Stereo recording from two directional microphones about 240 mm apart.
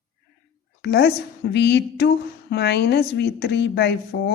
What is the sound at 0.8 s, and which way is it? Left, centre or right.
Speech, left.